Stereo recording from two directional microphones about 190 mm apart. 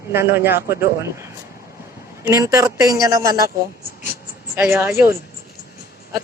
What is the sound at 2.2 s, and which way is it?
A man's voice, 15° right (ahead or behind).